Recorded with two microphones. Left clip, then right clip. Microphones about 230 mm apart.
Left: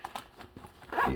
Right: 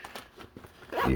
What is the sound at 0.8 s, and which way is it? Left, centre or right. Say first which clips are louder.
Clip-clop: even; centre.